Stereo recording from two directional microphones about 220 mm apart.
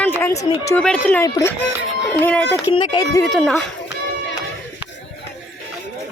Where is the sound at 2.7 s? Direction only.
25° left (ahead or behind).